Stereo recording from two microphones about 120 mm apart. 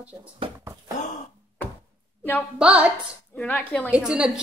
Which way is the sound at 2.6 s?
10° right (ahead or behind).